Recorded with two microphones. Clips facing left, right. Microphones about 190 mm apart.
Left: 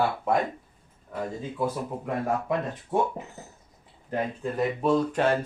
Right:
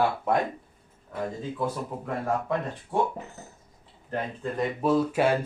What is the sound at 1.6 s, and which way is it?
Speech, 15° left (ahead or behind).